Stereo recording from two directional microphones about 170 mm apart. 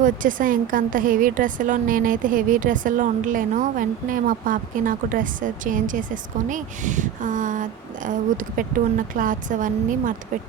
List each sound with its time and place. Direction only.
0.0 s a woman's voice: 50° right (ahead or behind)